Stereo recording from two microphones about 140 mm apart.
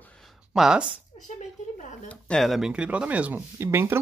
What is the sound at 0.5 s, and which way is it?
Speech, 5° right (ahead or behind).